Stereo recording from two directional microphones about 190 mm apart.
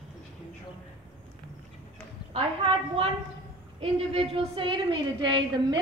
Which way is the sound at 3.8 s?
30° right (ahead or behind).